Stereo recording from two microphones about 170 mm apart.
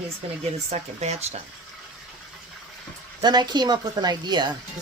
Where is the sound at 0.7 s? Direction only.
40° right (ahead or behind).